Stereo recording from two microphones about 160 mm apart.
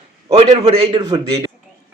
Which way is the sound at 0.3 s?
40° right (ahead or behind).